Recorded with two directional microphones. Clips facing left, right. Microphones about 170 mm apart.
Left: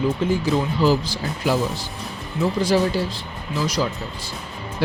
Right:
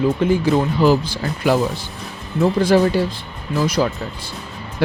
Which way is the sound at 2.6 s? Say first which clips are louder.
Right 4 dB; 55° right (ahead or behind).